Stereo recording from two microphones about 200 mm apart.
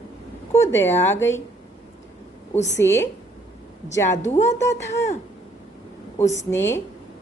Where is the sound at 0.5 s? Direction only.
15° left (ahead or behind).